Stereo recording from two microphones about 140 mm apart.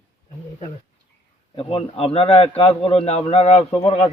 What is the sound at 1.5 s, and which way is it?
A man's voice, 40° left (ahead or behind).